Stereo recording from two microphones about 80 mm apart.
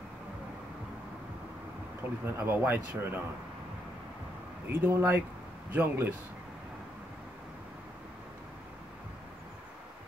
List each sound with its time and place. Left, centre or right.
2.2 s a man's voice: right
4.6 s a man's voice: right